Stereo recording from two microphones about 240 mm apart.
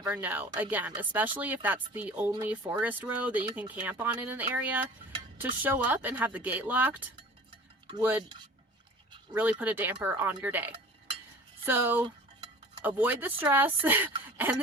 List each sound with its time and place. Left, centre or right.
0.0 s speech: centre
9.3 s speech: centre
12.0 s cutlery: right
13.0 s speech: centre